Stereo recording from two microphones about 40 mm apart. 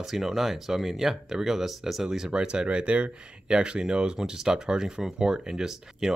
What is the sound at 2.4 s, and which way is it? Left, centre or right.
Speech, right.